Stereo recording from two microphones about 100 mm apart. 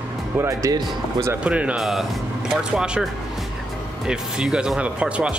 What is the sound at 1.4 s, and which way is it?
Speech, 10° right (ahead or behind).